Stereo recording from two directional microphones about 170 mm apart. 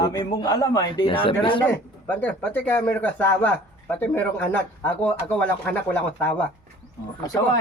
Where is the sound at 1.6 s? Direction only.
10° left (ahead or behind).